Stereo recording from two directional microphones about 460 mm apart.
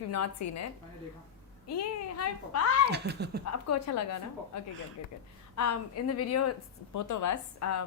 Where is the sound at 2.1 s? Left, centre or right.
Left.